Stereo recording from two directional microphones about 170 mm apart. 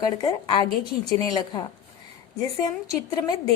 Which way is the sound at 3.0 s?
20° left (ahead or behind).